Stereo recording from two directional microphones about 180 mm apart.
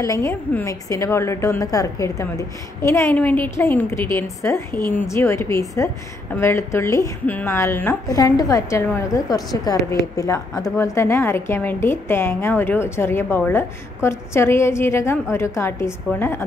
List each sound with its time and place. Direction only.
0.0 s a woman's voice: 15° left (ahead or behind)